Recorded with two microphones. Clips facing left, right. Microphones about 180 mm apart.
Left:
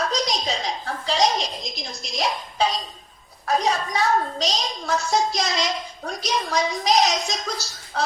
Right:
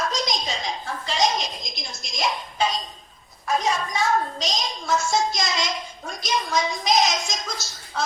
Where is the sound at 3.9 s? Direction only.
35° left (ahead or behind).